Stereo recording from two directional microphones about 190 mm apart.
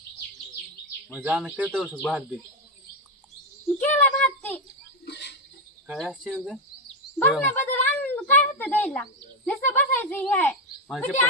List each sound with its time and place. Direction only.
1.2 s speech: 5° right (ahead or behind)
1.7 s cricket: 5° left (ahead or behind)
3.8 s speech: 10° left (ahead or behind)
5.0 s a sound: 65° left (ahead or behind)
5.9 s cricket: centre (ahead or behind)
7.4 s a sound: 10° left (ahead or behind)
9.6 s speech: 10° left (ahead or behind)